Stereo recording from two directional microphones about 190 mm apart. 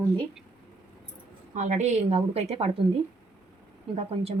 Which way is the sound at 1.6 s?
40° right (ahead or behind).